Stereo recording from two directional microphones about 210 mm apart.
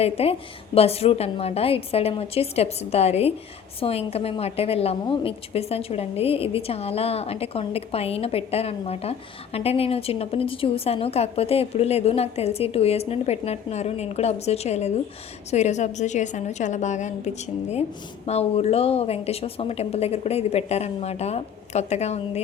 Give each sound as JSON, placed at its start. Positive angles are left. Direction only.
{"t": 0.0, "sound": "a woman's voice", "side_deg": 30}